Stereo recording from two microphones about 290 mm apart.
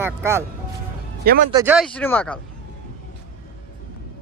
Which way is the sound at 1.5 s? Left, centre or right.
Centre.